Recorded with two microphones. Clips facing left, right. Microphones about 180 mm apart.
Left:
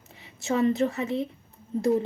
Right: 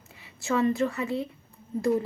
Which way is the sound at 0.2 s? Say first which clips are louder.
Left 1 dB; 20° left (ahead or behind).